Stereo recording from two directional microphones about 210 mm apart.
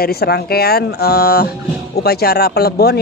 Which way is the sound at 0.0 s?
50° left (ahead or behind).